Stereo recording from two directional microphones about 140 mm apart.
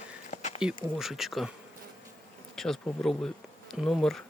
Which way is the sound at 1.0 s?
Centre (ahead or behind).